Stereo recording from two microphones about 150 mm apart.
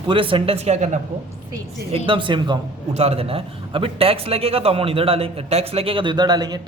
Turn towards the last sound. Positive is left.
turn(degrees=-30)  # may be behind; listen again after turning